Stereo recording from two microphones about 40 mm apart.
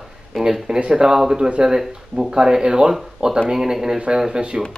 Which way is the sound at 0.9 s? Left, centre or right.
Centre.